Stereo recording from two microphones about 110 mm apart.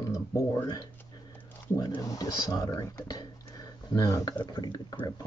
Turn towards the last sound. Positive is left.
turn(degrees=40)  # may be behind; listen again after turning